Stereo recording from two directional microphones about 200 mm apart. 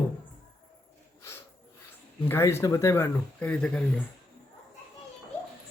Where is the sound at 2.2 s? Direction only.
10° left (ahead or behind).